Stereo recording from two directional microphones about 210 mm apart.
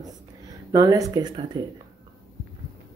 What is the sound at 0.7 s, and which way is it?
Speech, 20° right (ahead or behind).